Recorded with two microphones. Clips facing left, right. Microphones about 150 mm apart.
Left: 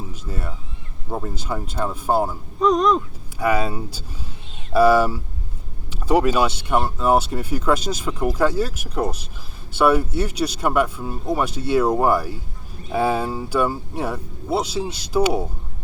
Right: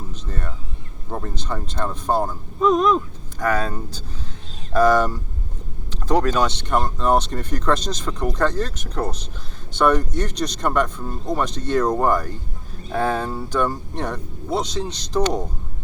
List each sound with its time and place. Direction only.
0.1 s speech: 10° left (ahead or behind)
2.6 s a sound: centre (ahead or behind)
3.4 s speech: 10° left (ahead or behind)